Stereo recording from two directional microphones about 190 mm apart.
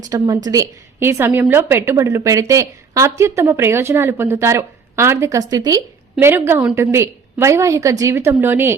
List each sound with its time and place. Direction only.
0.0 s a woman's voice: 20° right (ahead or behind)